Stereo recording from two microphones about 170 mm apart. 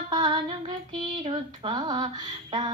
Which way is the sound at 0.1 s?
25° right (ahead or behind).